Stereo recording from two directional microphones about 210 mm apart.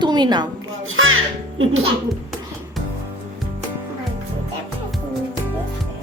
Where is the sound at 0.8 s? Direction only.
70° right (ahead or behind).